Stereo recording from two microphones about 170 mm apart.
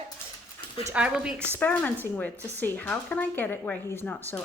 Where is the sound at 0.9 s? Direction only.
5° right (ahead or behind).